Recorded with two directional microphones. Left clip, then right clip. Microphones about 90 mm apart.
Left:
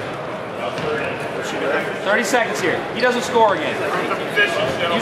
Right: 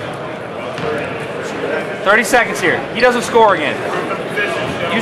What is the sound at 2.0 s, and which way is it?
Speech, 25° right (ahead or behind).